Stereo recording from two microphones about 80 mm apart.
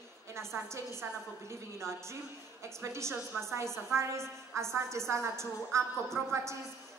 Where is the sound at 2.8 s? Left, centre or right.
Right.